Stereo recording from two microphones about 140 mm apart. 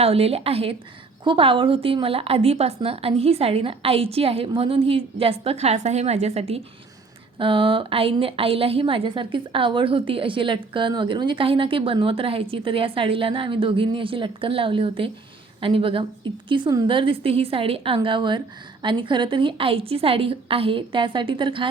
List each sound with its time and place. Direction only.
0.0 s a woman's voice: 45° right (ahead or behind)
7.3 s a woman's voice: 40° right (ahead or behind)